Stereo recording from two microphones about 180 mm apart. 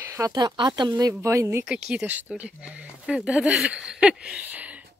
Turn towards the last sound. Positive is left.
turn(degrees=-10)  # may be behind; listen again after turning